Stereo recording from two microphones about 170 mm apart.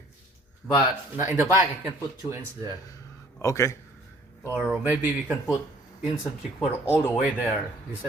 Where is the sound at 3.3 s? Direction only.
20° left (ahead or behind).